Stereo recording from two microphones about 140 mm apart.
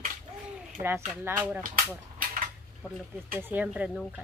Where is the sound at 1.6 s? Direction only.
80° right.